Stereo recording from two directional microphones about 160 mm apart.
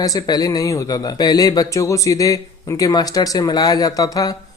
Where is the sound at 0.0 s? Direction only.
25° left (ahead or behind).